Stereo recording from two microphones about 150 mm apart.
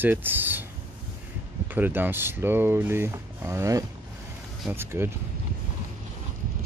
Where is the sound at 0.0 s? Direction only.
15° right (ahead or behind).